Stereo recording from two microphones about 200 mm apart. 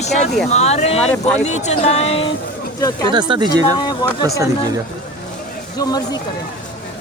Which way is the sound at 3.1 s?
20° right (ahead or behind).